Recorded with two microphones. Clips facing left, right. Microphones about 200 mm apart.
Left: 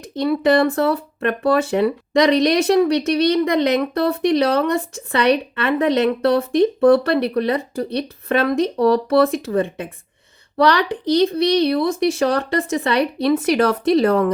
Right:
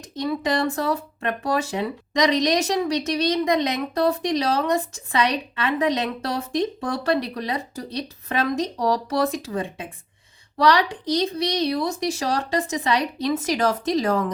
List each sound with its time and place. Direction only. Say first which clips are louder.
0.2 s speech: left 7 dB; 60° left (ahead or behind)